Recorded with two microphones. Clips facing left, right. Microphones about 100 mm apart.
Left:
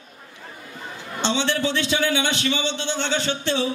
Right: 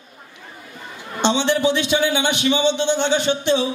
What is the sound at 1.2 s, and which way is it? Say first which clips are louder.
A man's voice: right 5 dB; 15° right (ahead or behind).